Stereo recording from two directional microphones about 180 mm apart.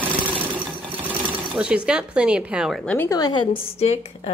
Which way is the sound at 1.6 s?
5° right (ahead or behind).